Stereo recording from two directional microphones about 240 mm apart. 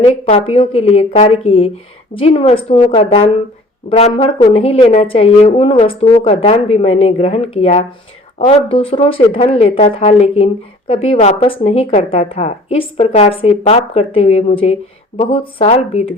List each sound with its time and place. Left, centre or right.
0.0 s speech: left